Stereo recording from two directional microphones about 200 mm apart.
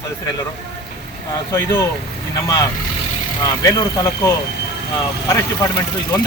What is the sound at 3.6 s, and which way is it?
Speech, 15° left (ahead or behind).